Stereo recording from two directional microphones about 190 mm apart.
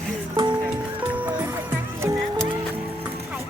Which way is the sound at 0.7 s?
10° right (ahead or behind).